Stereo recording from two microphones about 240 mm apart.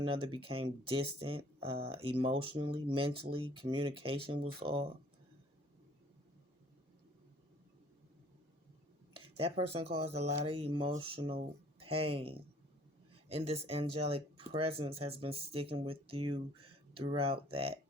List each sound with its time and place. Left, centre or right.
0.0 s speech: right
9.4 s speech: right